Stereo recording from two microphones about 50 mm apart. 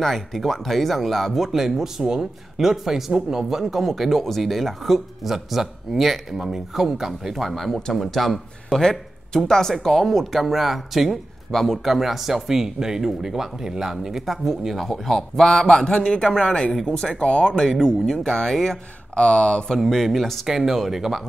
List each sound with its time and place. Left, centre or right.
0.0 s speech: centre
14.9 s a man's voice: centre
19.1 s speech: centre
19.8 s speech: centre